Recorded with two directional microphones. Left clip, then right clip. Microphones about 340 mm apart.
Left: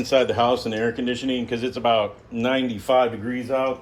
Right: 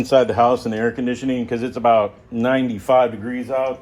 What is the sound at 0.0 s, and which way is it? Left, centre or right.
Speech, centre.